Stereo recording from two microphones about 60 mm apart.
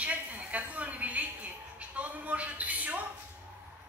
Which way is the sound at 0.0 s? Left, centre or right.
Right.